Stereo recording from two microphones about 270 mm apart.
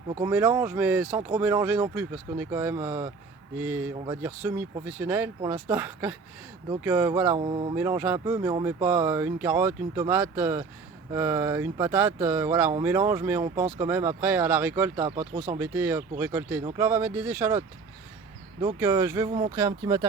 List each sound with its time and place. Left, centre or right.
0.2 s speech: centre
7.3 s speech: centre
7.8 s speech: centre
18.6 s speech: centre